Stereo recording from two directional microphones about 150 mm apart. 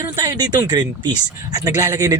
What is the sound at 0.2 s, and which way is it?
A man's voice, 25° right (ahead or behind).